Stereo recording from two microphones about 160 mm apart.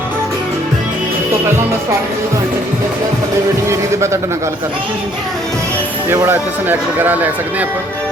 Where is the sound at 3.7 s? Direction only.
15° right (ahead or behind).